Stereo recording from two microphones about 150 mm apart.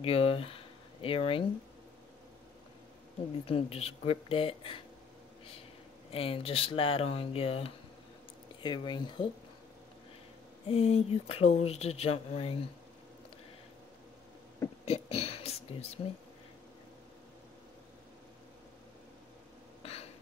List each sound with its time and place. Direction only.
0.0 s speech: 40° left (ahead or behind)
3.4 s speech: 40° left (ahead or behind)
6.1 s speech: 40° left (ahead or behind)
8.6 s speech: 30° left (ahead or behind)
10.7 s speech: 40° left (ahead or behind)
14.9 s a sound: 40° left (ahead or behind)
19.8 s a sound: 40° left (ahead or behind)